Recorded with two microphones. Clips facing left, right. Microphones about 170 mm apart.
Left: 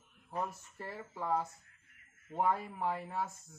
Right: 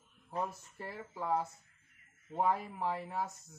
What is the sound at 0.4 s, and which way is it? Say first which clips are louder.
Speech: right 1 dB; 5° right (ahead or behind).